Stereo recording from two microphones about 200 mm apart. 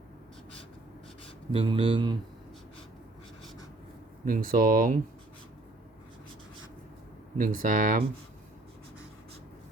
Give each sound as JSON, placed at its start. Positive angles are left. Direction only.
{"t": 1.5, "sound": "speech", "side_deg": -25}
{"t": 4.3, "sound": "speech", "side_deg": -45}
{"t": 7.3, "sound": "speech", "side_deg": -45}